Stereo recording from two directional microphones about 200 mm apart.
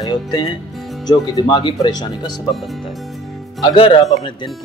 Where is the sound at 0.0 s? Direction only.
20° left (ahead or behind).